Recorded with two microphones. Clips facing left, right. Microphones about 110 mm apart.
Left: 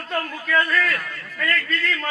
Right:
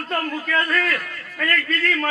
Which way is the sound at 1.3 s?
50° right (ahead or behind).